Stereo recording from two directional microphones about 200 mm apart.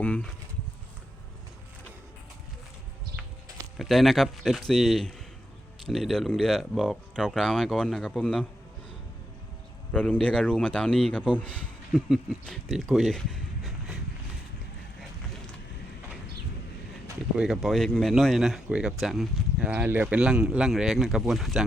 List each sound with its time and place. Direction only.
0.0 s speech: 5° left (ahead or behind)
3.8 s speech: centre (ahead or behind)
9.9 s speech: 5° left (ahead or behind)
17.3 s speech: 5° right (ahead or behind)